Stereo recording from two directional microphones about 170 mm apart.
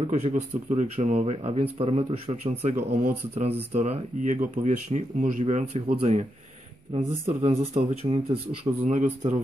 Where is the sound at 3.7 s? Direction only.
45° right (ahead or behind).